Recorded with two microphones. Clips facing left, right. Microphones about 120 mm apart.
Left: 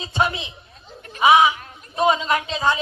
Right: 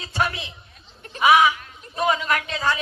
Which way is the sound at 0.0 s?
20° left (ahead or behind).